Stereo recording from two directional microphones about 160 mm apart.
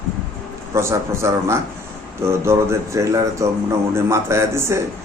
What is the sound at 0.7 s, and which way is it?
A man's voice, 15° right (ahead or behind).